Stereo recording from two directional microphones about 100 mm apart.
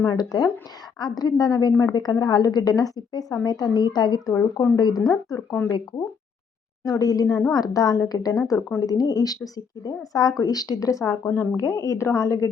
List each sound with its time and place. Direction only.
0.0 s a woman's voice: 40° left (ahead or behind)
4.4 s speech: 30° left (ahead or behind)
4.8 s speech: 40° left (ahead or behind)
7.0 s speech: 40° left (ahead or behind)